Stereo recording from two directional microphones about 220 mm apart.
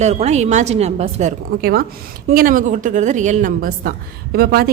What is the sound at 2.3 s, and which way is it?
A woman's voice, 40° right (ahead or behind).